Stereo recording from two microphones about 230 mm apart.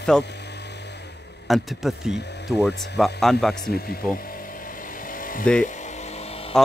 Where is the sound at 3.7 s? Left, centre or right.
Left.